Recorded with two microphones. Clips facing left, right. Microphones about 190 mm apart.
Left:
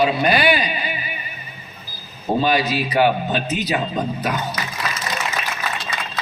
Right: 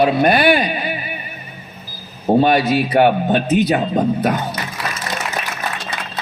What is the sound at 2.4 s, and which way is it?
A man's voice, 55° right (ahead or behind).